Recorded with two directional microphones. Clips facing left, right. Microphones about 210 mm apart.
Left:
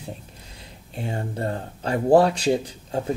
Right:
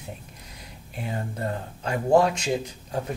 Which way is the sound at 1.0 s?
30° left (ahead or behind).